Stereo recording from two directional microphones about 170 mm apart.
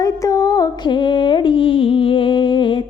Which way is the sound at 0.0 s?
20° left (ahead or behind).